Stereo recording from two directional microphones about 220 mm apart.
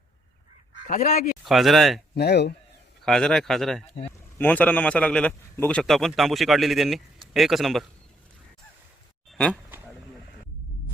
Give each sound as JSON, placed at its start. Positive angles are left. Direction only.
{"t": 0.9, "sound": "speech", "side_deg": 40}
{"t": 1.5, "sound": "a man's voice", "side_deg": 0}
{"t": 2.1, "sound": "speech", "side_deg": 50}
{"t": 3.0, "sound": "a man's voice", "side_deg": 0}
{"t": 9.3, "sound": "a sound", "side_deg": 5}